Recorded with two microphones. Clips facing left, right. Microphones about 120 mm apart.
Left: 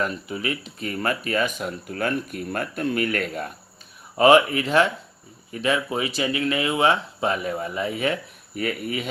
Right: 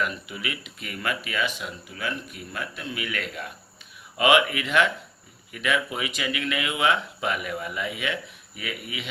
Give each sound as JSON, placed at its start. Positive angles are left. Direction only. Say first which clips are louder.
{"t": 0.0, "sound": "speech", "louder": "left 4 dB", "side_deg": 35}